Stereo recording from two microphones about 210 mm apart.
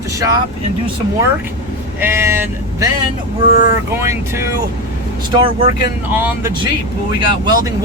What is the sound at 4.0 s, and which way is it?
Speech, 15° right (ahead or behind).